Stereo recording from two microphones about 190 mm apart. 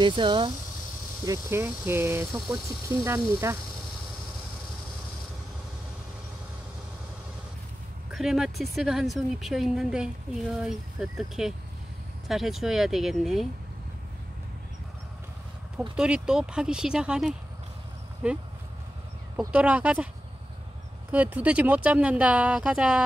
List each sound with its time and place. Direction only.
0.0 s speech: 25° right (ahead or behind)
1.2 s speech: 15° right (ahead or behind)
8.1 s speech: 5° right (ahead or behind)
16.0 s speech: 5° right (ahead or behind)
21.1 s speech: 10° right (ahead or behind)